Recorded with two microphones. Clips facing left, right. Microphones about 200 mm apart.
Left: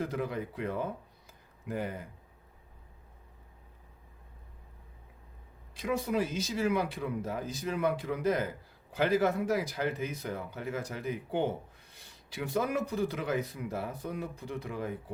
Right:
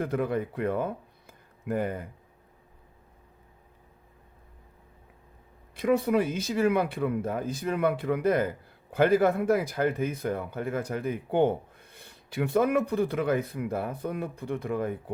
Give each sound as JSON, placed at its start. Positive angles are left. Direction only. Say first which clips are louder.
{"t": 0.0, "sound": "speech", "louder": "right 6 dB", "side_deg": -55}
{"t": 1.3, "sound": "a sound", "louder": "right 7 dB", "side_deg": -55}
{"t": 5.7, "sound": "speech", "louder": "right 7 dB", "side_deg": -60}